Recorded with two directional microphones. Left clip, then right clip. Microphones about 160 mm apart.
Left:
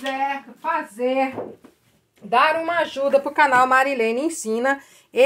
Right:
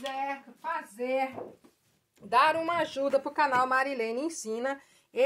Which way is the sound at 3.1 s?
20° right (ahead or behind).